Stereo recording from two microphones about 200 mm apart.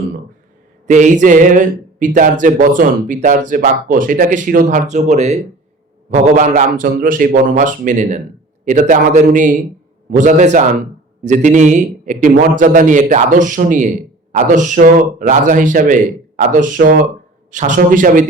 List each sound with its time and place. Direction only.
0.9 s speech: 35° right (ahead or behind)